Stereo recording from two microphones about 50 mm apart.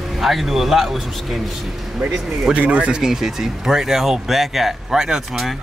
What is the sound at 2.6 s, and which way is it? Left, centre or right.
Speech, right.